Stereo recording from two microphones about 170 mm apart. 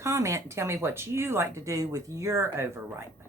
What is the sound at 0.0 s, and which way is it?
Speech, 15° right (ahead or behind).